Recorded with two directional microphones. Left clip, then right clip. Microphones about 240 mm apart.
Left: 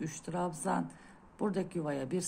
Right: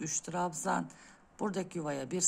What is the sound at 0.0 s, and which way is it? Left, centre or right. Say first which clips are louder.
Speech: right 2 dB; centre.